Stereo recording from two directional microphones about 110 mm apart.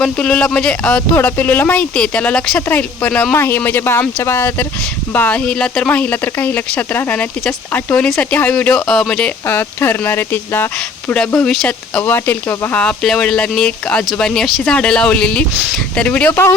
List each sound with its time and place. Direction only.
0.0 s speech: 10° left (ahead or behind)
11.4 s speech: 5° left (ahead or behind)
12.0 s speech: 20° left (ahead or behind)
12.8 s speech: 5° left (ahead or behind)